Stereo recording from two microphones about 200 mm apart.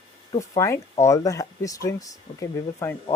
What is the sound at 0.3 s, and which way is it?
Speech, 15° left (ahead or behind).